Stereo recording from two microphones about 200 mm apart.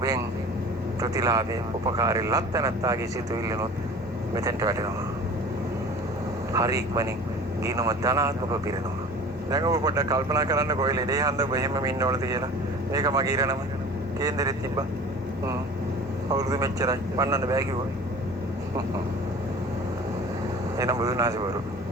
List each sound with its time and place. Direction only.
1.0 s speech: 15° right (ahead or behind)
6.5 s speech: 15° right (ahead or behind)
16.3 s speech: 15° right (ahead or behind)
20.7 s speech: 20° right (ahead or behind)